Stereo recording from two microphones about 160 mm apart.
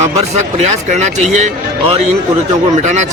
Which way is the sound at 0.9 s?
45° right (ahead or behind).